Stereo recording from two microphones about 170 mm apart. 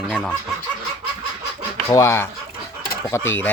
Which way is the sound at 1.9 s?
15° left (ahead or behind).